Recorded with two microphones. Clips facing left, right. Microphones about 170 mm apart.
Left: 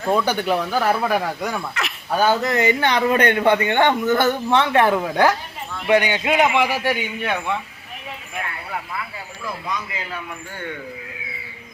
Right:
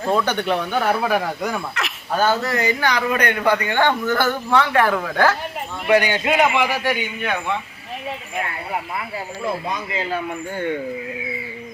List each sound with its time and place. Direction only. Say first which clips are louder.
0.1 s speech: left 1 dB; 5° left (ahead or behind)
2.1 s a man's voice: left 1 dB; 15° left (ahead or behind)
6.7 s speech: even; 5° left (ahead or behind)
8.7 s speech: right 3 dB; 30° right (ahead or behind)